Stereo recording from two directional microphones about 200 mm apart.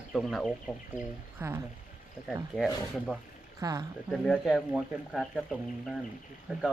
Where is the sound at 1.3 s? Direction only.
10° right (ahead or behind).